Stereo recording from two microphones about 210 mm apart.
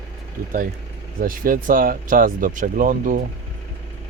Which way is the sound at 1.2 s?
40° right (ahead or behind).